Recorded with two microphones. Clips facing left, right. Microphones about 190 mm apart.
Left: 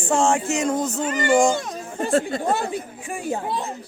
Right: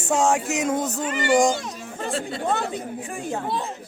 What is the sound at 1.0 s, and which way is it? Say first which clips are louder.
Music: left 2 dB; 40° left (ahead or behind).